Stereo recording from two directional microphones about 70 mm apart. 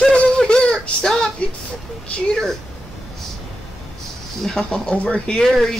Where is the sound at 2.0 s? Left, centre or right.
Centre.